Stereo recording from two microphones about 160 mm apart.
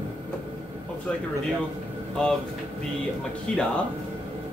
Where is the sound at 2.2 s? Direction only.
5° left (ahead or behind).